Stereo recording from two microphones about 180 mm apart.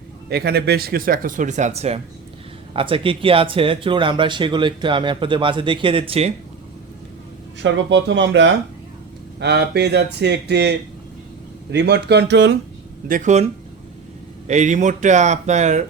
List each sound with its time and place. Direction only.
0.3 s speech: 60° right (ahead or behind); by 6.3 s 35° right (ahead or behind)
7.6 s speech: 85° right
9.4 s speech: 70° right (ahead or behind)
13.1 s speech: 45° right (ahead or behind)